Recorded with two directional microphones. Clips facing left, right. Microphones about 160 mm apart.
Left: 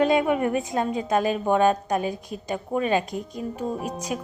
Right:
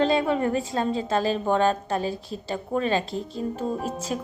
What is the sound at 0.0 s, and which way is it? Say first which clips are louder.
A woman's voice: left 1 dB; 15° left (ahead or behind).